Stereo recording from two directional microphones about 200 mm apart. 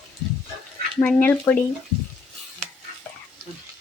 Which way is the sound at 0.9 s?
10° left (ahead or behind).